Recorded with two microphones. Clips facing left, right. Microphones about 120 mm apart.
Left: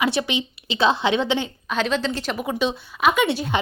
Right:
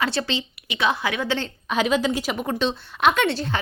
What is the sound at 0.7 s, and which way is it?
Speech, 30° left (ahead or behind).